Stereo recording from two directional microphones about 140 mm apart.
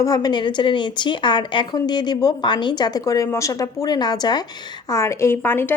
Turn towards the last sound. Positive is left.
turn(degrees=15)  # may be behind; listen again after turning